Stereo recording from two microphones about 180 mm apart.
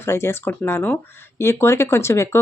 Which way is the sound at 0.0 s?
15° left (ahead or behind).